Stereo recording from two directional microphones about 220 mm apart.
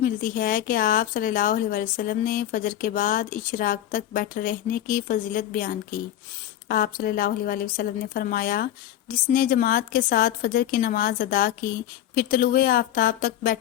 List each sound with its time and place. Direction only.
0.0 s a woman's voice: 40° left (ahead or behind)